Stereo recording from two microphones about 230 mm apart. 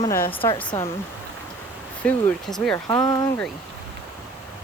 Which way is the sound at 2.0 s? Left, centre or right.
Centre.